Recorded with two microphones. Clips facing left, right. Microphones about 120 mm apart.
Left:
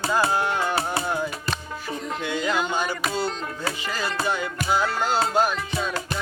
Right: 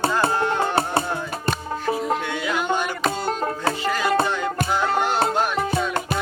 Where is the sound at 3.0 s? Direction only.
45° right (ahead or behind).